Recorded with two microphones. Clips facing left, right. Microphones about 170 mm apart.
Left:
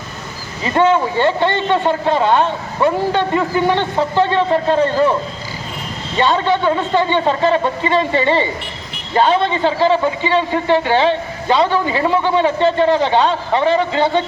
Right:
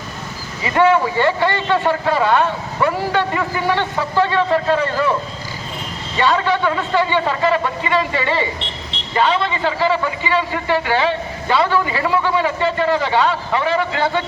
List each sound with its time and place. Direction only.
0.6 s a man's voice: 25° left (ahead or behind)
6.1 s a man's voice: 25° left (ahead or behind)
8.6 s vehicle: 25° right (ahead or behind)
9.1 s a man's voice: 30° left (ahead or behind)